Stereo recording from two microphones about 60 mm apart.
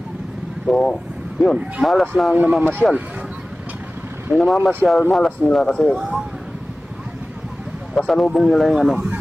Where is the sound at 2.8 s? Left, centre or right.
Right.